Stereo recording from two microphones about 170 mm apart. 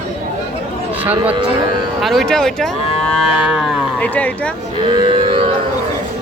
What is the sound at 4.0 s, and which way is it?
Speech, 10° left (ahead or behind).